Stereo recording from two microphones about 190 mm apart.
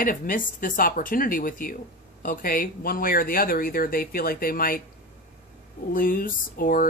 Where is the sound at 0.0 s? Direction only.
45° left (ahead or behind).